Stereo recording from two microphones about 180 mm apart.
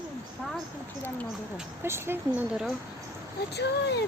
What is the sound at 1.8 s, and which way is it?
Speech, 15° right (ahead or behind).